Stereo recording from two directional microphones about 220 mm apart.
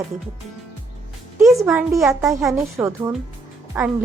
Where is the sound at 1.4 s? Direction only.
15° right (ahead or behind).